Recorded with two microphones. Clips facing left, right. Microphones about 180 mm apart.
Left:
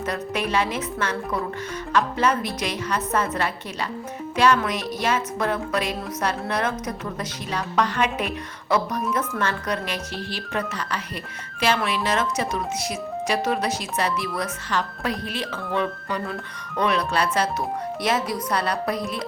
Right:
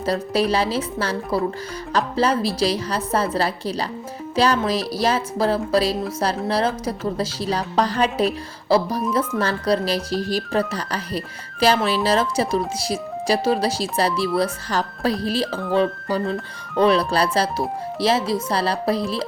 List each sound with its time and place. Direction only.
0.0 s speech: 35° right (ahead or behind)